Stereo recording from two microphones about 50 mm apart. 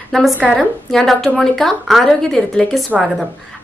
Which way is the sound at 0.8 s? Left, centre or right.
Centre.